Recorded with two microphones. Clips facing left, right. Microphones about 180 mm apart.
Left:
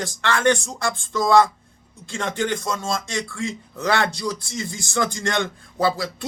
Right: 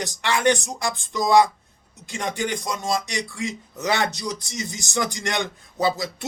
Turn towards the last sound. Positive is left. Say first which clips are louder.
# left 1 dB
turn(degrees=-20)  # may be behind; listen again after turning